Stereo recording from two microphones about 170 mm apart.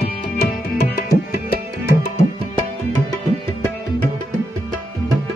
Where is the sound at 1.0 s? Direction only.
65° left (ahead or behind).